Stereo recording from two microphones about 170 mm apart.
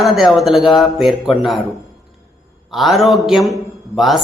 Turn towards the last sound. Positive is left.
turn(degrees=0)  # may be behind; listen again after turning